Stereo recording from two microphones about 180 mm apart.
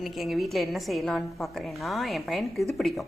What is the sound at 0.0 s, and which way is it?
A woman's voice, centre (ahead or behind).